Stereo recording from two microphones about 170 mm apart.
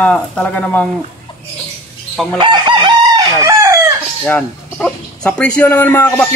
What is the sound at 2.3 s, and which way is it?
Chicken, 25° right (ahead or behind).